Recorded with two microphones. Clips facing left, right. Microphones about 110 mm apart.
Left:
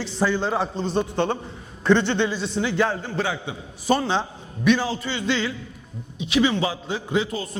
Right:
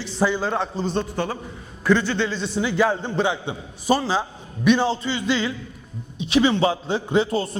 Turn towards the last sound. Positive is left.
turn(degrees=-35)  # may be behind; listen again after turning